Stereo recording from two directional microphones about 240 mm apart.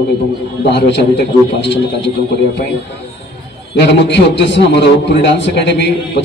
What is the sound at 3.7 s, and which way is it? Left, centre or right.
A man's voice, left.